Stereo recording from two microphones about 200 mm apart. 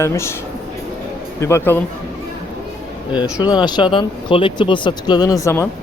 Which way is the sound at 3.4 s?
20° left (ahead or behind).